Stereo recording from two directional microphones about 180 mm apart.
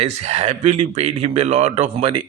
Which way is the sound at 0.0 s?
35° right (ahead or behind).